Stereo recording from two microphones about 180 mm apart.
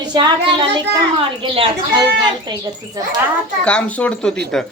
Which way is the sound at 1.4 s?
30° right (ahead or behind).